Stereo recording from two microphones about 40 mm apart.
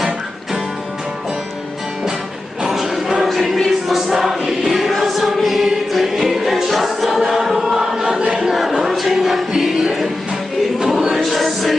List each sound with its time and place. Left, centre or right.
2.6 s a sound: centre
3.2 s choir: centre
8.3 s a sound: centre
8.5 s choir: centre
9.5 s music: centre
10.8 s choir: centre